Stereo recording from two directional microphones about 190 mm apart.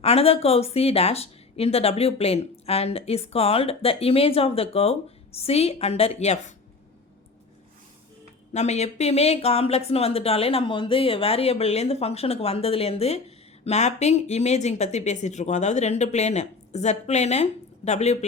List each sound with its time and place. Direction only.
0.0 s speech: 30° left (ahead or behind)
8.5 s speech: 35° left (ahead or behind)